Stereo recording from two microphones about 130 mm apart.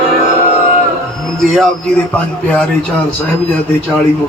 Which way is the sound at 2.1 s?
5° left (ahead or behind).